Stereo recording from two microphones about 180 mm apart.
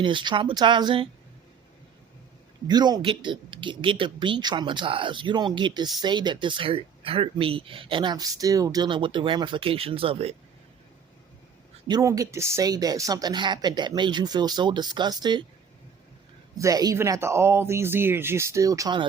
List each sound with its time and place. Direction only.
0.0 s speech: 25° right (ahead or behind)
2.6 s speech: 25° right (ahead or behind)
11.9 s speech: 20° right (ahead or behind)
16.6 s speech: 20° right (ahead or behind)